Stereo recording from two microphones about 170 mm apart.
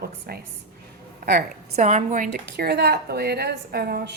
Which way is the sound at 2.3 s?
75° right (ahead or behind).